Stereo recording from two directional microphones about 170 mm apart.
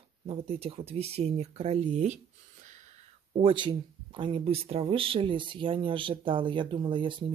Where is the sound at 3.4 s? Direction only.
30° right (ahead or behind).